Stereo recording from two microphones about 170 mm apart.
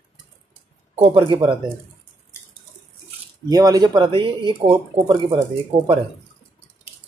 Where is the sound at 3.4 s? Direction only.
20° right (ahead or behind).